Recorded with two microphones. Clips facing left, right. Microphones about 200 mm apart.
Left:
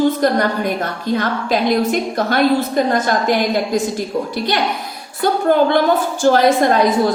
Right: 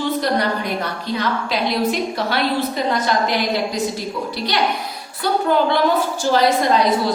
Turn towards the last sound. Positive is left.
turn(degrees=50)  # may be behind; listen again after turning